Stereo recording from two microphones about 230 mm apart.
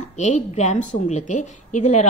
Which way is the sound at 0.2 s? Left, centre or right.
Left.